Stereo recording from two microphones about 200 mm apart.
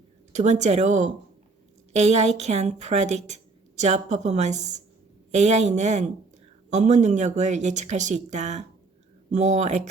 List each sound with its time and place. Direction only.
0.3 s speech: 35° right (ahead or behind)